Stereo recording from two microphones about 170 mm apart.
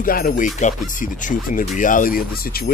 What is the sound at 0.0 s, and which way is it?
Speech, 55° left (ahead or behind).